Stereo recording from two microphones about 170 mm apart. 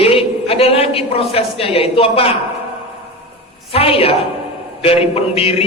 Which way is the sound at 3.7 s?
35° left (ahead or behind).